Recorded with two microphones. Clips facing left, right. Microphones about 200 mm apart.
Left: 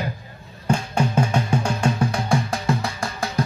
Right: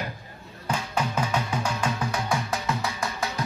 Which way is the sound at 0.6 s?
30° left (ahead or behind).